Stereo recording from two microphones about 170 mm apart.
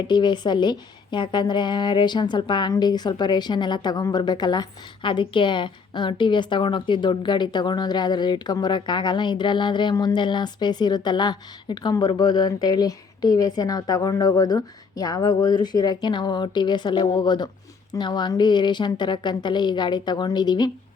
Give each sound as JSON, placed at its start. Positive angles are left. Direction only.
{"t": 0.1, "sound": "a woman's voice", "side_deg": 25}